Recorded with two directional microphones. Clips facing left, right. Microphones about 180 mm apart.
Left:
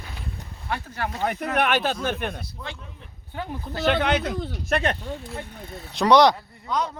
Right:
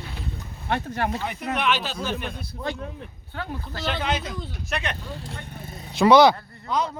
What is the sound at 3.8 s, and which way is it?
Speech, 65° left (ahead or behind).